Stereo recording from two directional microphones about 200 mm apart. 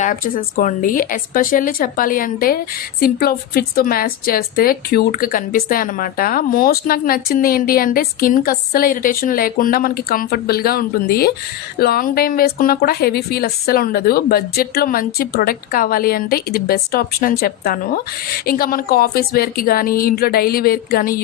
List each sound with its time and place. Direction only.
0.0 s speech: 45° left (ahead or behind)